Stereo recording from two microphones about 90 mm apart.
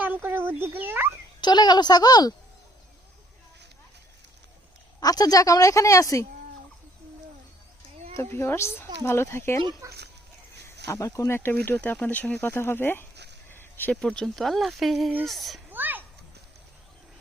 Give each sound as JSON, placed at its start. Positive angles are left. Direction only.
{"t": 0.0, "sound": "speech", "side_deg": -20}
{"t": 1.4, "sound": "a woman's voice", "side_deg": 50}
{"t": 4.9, "sound": "a woman's voice", "side_deg": 45}
{"t": 8.1, "sound": "a child's voice", "side_deg": 25}
{"t": 10.8, "sound": "a woman's voice", "side_deg": 35}
{"t": 11.3, "sound": "speech", "side_deg": 25}
{"t": 12.4, "sound": "a child's voice", "side_deg": 25}
{"t": 13.5, "sound": "a sound", "side_deg": 25}
{"t": 13.9, "sound": "speech", "side_deg": 10}
{"t": 15.7, "sound": "a sound", "side_deg": -20}